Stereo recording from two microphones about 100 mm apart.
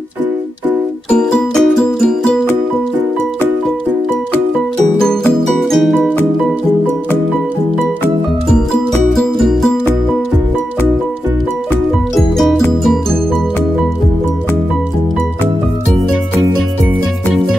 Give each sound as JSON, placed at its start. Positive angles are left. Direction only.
{"t": 1.1, "sound": "music", "side_deg": 5}
{"t": 5.6, "sound": "music", "side_deg": 0}
{"t": 9.1, "sound": "music", "side_deg": 0}
{"t": 12.2, "sound": "music", "side_deg": 0}